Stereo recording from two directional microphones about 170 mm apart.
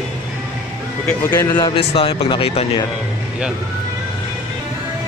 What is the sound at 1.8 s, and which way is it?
Speech, 35° left (ahead or behind).